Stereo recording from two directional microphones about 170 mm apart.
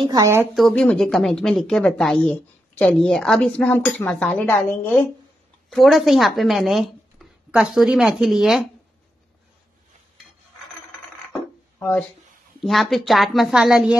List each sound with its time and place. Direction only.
0.0 s speech: 20° right (ahead or behind)
0.6 s a woman's voice: 5° left (ahead or behind)
12.6 s a woman's voice: centre (ahead or behind)